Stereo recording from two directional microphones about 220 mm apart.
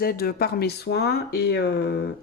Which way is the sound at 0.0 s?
45° left (ahead or behind).